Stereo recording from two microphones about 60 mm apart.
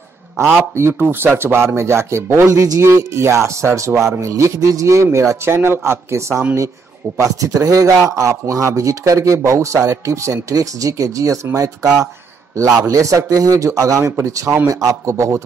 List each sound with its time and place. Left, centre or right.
0.7 s speech: right
2.4 s speech: right
2.8 s speech: right
5.0 s speech: right
7.2 s speech: right
8.1 s speech: right